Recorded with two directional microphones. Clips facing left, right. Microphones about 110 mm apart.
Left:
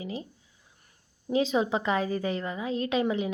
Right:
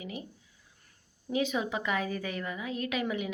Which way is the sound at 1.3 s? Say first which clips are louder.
Left 5 dB; 30° left (ahead or behind).